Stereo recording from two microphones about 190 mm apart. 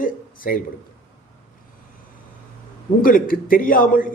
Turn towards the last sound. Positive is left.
turn(degrees=45)  # may be behind; listen again after turning